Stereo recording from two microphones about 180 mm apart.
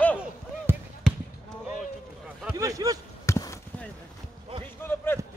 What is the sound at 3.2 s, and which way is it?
Basketball bounce, 15° left (ahead or behind).